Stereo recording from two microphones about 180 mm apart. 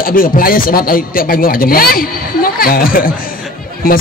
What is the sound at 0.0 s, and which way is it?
A man's voice, 50° left (ahead or behind).